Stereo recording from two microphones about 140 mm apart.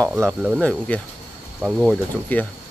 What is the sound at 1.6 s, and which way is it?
Speech, 5° right (ahead or behind).